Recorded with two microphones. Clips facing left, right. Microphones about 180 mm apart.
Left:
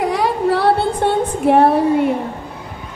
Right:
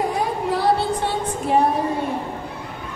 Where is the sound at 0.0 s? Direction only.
75° left (ahead or behind).